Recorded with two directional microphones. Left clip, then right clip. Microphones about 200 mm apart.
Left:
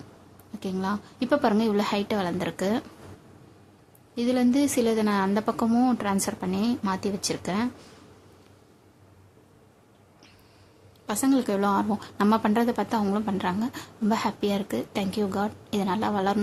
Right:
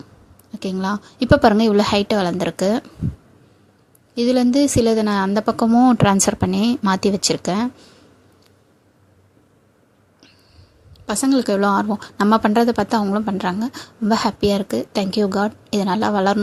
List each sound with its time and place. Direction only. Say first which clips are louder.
0.6 s a woman's voice: right 6 dB; 30° right (ahead or behind)
4.1 s a woman's voice: right 7 dB; 30° right (ahead or behind)
5.9 s a woman's voice: right 11 dB; 35° right (ahead or behind)
11.0 s speech: right 6 dB; 30° right (ahead or behind)